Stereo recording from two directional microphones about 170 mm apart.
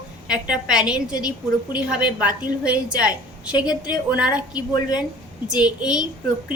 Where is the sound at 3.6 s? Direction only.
25° left (ahead or behind).